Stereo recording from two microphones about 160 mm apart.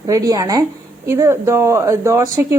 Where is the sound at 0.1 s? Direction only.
20° right (ahead or behind).